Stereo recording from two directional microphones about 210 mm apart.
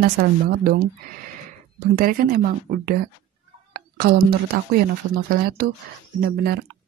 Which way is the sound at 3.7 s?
45° right (ahead or behind).